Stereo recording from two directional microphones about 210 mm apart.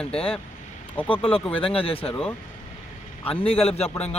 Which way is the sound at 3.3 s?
25° left (ahead or behind).